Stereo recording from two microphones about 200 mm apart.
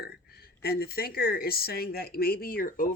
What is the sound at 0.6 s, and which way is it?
Speech, 50° left (ahead or behind).